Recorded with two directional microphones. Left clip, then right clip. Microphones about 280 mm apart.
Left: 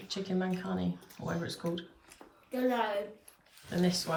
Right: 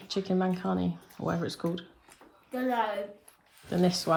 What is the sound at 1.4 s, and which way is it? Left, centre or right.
Speech, centre.